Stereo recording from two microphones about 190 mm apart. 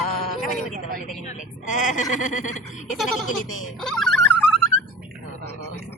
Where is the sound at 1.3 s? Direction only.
40° left (ahead or behind).